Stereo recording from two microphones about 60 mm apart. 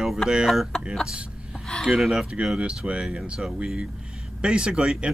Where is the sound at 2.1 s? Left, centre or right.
Centre.